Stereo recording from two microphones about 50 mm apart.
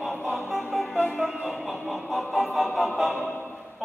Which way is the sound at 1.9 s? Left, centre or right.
Centre.